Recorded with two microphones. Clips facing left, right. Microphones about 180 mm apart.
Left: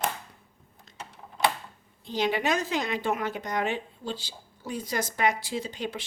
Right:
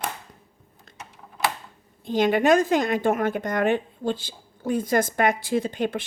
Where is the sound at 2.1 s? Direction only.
50° right (ahead or behind).